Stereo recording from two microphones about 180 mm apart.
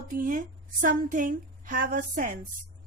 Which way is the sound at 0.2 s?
50° right (ahead or behind).